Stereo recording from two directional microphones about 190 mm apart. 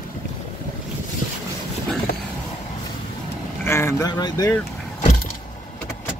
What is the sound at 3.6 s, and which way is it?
Vehicle, 15° left (ahead or behind).